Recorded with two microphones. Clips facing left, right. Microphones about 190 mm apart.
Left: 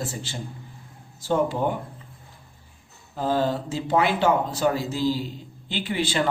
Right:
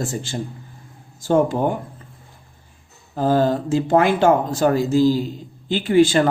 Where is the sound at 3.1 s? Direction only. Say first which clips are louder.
Right 6 dB; 45° right (ahead or behind).